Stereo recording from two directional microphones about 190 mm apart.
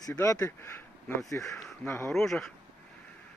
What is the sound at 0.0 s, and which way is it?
Speech, 15° left (ahead or behind).